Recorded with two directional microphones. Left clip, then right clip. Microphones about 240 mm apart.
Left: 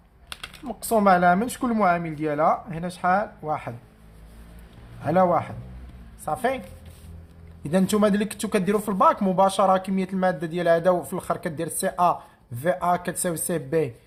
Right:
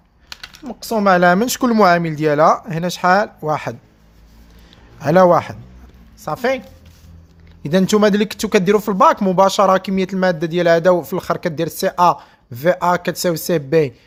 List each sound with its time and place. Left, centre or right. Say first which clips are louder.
0.7 s speech: right 4 dB; right
4.9 s speech: right 9 dB; right
7.6 s speech: right 8 dB; right